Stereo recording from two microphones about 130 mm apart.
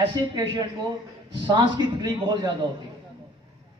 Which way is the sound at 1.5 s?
35° right (ahead or behind).